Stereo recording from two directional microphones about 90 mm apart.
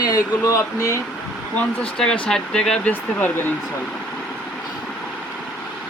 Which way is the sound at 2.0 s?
10° left (ahead or behind).